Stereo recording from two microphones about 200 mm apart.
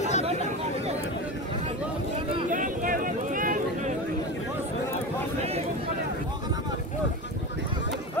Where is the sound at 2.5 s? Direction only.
40° right (ahead or behind).